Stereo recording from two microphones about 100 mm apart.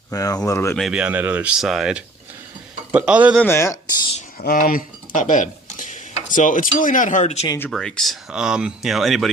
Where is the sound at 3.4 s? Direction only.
25° left (ahead or behind).